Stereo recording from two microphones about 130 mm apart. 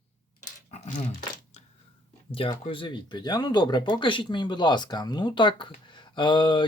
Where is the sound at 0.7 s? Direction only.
70° left (ahead or behind).